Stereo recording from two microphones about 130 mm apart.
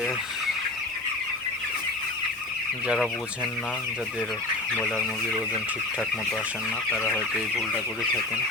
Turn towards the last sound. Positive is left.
turn(degrees=15)  # may be behind; listen again after turning